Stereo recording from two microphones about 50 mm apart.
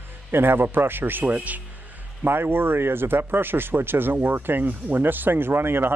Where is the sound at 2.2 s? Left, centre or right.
Right.